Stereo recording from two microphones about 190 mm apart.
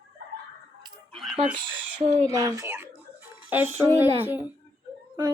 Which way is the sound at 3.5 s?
10° right (ahead or behind).